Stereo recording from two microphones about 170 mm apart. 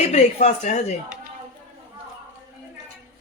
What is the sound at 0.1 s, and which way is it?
Speech, 45° left (ahead or behind).